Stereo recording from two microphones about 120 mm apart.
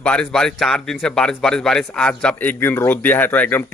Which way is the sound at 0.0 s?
10° left (ahead or behind).